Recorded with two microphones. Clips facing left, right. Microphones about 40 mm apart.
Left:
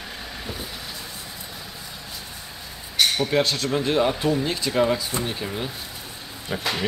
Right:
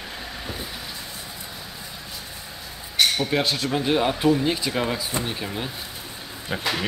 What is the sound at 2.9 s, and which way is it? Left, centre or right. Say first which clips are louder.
Speech: left 1 dB; centre.